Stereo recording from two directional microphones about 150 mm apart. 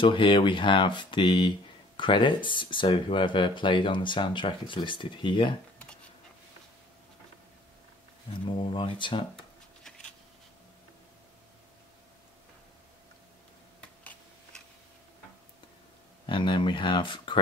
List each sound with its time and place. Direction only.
0.0 s speech: 35° left (ahead or behind)
8.5 s speech: 35° left (ahead or behind)
13.7 s a sound: 5° left (ahead or behind)
16.3 s speech: 35° left (ahead or behind)